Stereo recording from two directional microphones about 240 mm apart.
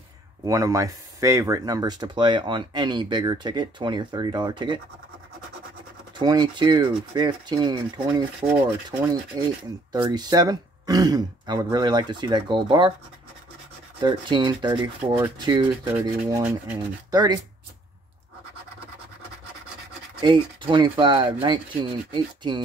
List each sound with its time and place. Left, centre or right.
0.5 s speech: centre
6.1 s speech: centre
9.3 s speech: centre
14.0 s speech: centre
20.2 s speech: centre